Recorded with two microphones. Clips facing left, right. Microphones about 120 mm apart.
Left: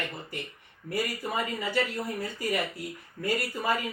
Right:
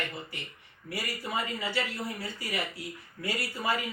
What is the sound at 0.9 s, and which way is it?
Speech, 45° left (ahead or behind).